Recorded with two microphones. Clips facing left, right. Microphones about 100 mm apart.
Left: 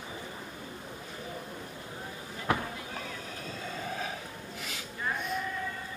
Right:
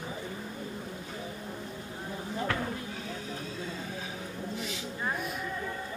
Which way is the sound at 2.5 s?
15° left (ahead or behind).